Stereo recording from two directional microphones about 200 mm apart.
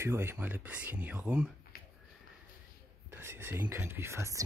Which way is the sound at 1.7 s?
50° left (ahead or behind).